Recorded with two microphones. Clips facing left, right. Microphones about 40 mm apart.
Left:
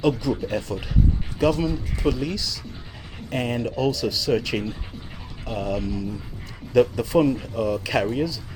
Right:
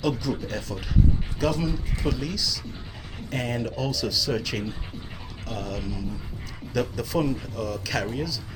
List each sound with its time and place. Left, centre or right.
0.2 s speech: centre
5.8 s speech: centre
6.7 s speech: centre